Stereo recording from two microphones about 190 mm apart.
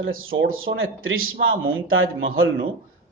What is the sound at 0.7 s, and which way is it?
Speech, 90° right.